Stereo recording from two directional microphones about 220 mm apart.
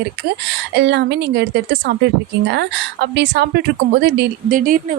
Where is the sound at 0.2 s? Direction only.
50° right (ahead or behind).